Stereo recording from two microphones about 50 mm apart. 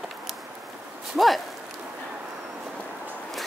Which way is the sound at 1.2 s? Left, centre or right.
Centre.